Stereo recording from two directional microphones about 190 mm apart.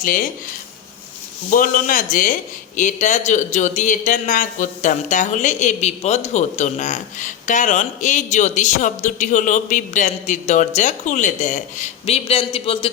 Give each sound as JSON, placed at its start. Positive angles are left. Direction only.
{"t": 0.0, "sound": "speech", "side_deg": 45}
{"t": 1.5, "sound": "speech", "side_deg": 45}